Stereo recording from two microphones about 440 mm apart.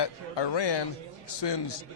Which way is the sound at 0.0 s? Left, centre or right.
Left.